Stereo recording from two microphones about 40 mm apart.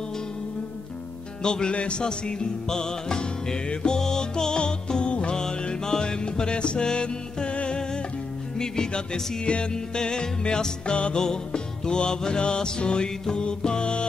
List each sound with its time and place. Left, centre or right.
1.4 s music: left